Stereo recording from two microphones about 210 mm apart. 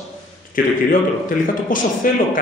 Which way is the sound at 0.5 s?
40° left (ahead or behind).